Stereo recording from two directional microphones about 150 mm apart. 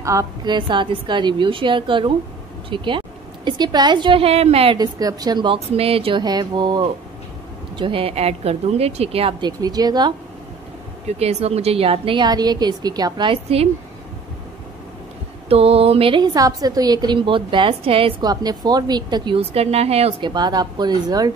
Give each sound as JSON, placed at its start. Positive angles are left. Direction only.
{"t": 0.0, "sound": "a woman's voice", "side_deg": -20}
{"t": 0.6, "sound": "a woman's voice", "side_deg": -35}
{"t": 4.7, "sound": "a woman's voice", "side_deg": -25}
{"t": 9.4, "sound": "a woman's voice", "side_deg": -25}
{"t": 11.1, "sound": "a woman's voice", "side_deg": -45}
{"t": 15.4, "sound": "a woman's voice", "side_deg": -40}
{"t": 18.3, "sound": "a woman's voice", "side_deg": -25}